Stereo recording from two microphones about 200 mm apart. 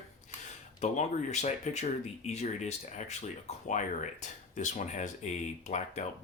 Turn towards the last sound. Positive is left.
turn(degrees=35)  # may be behind; listen again after turning